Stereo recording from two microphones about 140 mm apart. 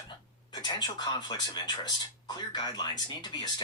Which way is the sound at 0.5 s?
30° left (ahead or behind).